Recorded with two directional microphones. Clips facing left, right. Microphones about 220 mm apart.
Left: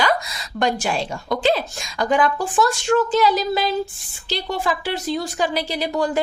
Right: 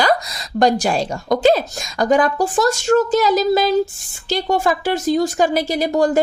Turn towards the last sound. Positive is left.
turn(degrees=-45)  # may be behind; listen again after turning